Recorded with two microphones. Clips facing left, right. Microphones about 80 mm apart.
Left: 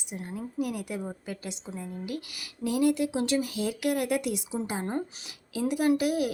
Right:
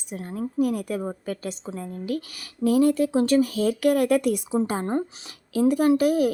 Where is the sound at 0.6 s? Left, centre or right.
Right.